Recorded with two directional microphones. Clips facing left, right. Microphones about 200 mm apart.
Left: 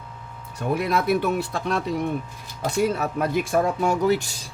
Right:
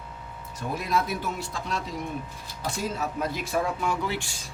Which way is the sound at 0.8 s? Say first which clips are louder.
Left 6 dB; 65° left (ahead or behind).